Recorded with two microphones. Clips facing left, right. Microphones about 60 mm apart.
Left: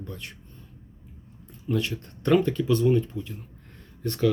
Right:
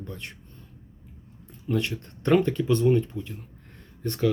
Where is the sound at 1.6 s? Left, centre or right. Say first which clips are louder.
Even; right.